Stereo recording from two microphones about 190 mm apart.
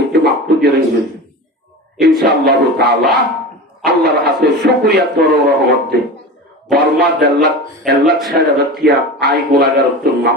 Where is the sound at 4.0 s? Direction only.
60° right (ahead or behind).